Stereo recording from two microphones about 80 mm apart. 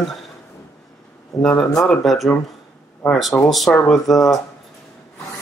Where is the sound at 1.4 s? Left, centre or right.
Centre.